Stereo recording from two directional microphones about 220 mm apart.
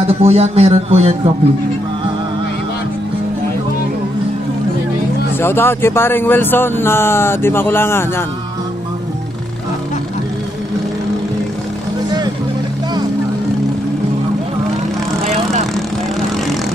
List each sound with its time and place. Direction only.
0.0 s a man's voice: 30° right (ahead or behind)
5.4 s speech: 10° left (ahead or behind)